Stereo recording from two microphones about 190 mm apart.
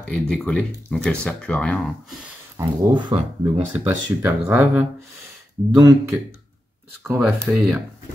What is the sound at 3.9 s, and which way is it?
Speech, 10° right (ahead or behind).